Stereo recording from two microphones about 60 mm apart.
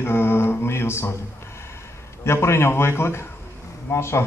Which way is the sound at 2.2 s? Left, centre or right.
Left.